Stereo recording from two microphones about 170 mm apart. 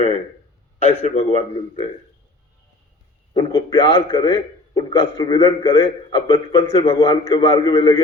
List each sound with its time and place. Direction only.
0.8 s a man's voice: 35° left (ahead or behind)
3.3 s a man's voice: 30° left (ahead or behind)
5.6 s a man's voice: 30° left (ahead or behind)